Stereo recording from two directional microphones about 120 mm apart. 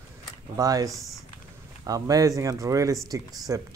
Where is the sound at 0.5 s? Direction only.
30° right (ahead or behind).